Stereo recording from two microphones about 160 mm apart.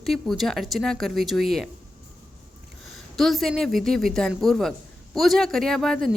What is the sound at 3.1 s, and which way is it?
A woman's voice, centre (ahead or behind).